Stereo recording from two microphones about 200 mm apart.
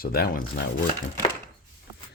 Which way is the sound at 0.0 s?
50° left (ahead or behind).